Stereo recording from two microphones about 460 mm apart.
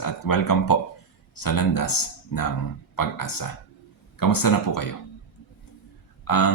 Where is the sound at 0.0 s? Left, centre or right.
Left.